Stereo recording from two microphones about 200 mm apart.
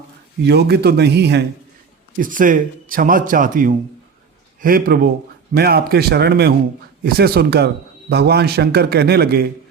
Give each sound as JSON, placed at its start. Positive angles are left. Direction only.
{"t": 0.4, "sound": "speech", "side_deg": -55}
{"t": 2.1, "sound": "speech", "side_deg": -45}